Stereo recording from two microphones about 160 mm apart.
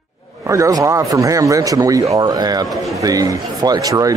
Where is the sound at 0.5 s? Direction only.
20° right (ahead or behind).